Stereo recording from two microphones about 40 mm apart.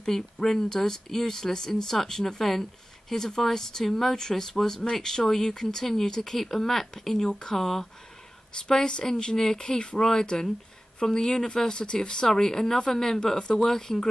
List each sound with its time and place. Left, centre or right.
0.0 s speech: centre
8.6 s a woman's voice: left